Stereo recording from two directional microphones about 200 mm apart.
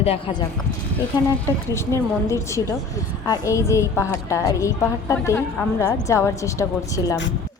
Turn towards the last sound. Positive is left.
turn(degrees=15)  # may be behind; listen again after turning